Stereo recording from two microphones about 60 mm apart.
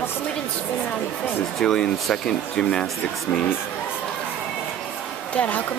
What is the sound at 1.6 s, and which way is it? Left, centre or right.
Speech, centre.